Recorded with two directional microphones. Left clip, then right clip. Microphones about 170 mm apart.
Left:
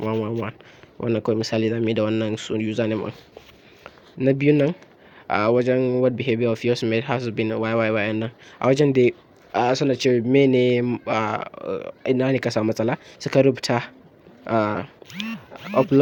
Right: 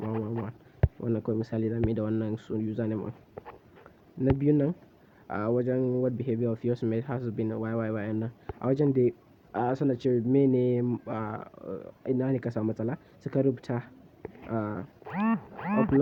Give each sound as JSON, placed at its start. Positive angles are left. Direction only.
{"t": 1.0, "sound": "speech", "side_deg": 15}
{"t": 4.2, "sound": "speech", "side_deg": 10}
{"t": 15.1, "sound": "a sound", "side_deg": 15}